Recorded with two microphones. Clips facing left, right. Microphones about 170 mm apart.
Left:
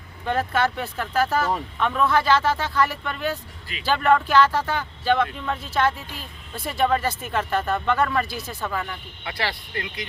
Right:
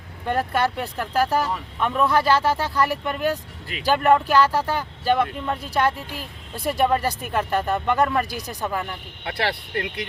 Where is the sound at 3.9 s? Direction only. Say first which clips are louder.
Right 2 dB; 10° right (ahead or behind).